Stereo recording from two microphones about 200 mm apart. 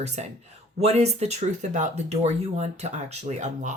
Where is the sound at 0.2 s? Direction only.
35° right (ahead or behind).